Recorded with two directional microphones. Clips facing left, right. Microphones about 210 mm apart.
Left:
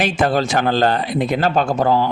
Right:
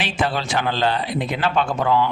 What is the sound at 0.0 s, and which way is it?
Speech, 45° left (ahead or behind).